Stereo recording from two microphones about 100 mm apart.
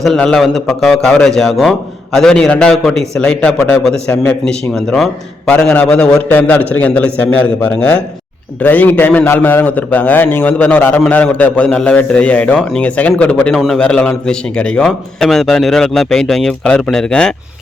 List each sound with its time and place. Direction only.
0.2 s a man's voice: 5° left (ahead or behind)